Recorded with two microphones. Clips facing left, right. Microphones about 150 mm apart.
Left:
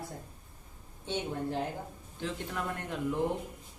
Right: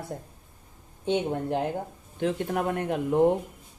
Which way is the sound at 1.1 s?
60° right (ahead or behind).